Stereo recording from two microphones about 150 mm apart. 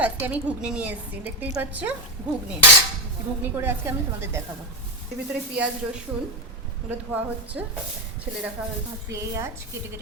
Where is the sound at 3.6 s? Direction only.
15° right (ahead or behind).